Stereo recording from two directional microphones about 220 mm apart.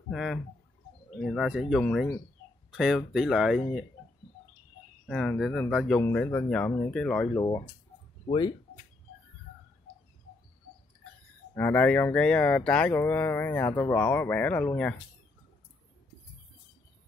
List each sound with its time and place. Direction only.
0.1 s speech: centre (ahead or behind)
5.0 s speech: 5° left (ahead or behind)
7.3 s speech: 15° left (ahead or behind)
11.5 s speech: 10° left (ahead or behind)